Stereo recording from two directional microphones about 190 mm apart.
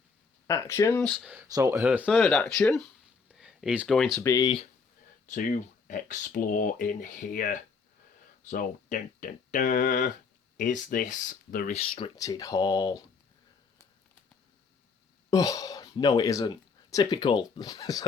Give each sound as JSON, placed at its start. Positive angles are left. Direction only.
{"t": 0.4, "sound": "speech", "side_deg": 15}
{"t": 1.3, "sound": "speech", "side_deg": -15}
{"t": 2.0, "sound": "speech", "side_deg": 5}
{"t": 4.2, "sound": "speech", "side_deg": 20}
{"t": 5.2, "sound": "speech", "side_deg": 45}
{"t": 11.8, "sound": "speech", "side_deg": 30}
{"t": 15.3, "sound": "speech", "side_deg": 20}